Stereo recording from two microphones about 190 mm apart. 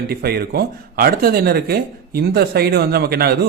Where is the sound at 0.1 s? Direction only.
55° right (ahead or behind).